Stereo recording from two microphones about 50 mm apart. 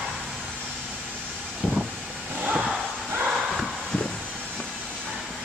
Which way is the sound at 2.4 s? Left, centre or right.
Right.